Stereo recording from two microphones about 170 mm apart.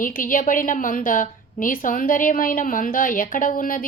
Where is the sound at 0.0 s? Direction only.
55° left (ahead or behind).